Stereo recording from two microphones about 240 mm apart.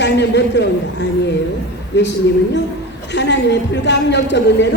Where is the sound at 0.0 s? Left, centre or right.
Left.